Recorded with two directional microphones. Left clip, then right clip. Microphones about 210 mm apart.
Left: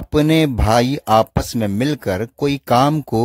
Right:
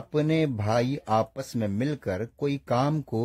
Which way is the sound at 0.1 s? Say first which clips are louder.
Left 10 dB; 45° left (ahead or behind).